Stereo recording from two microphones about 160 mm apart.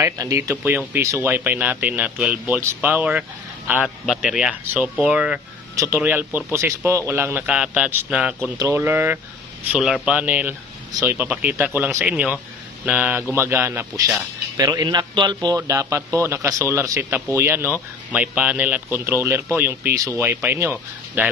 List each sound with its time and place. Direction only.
0.0 s speech: 20° right (ahead or behind)
5.8 s speech: 15° right (ahead or behind)
8.5 s a man's voice: 15° right (ahead or behind)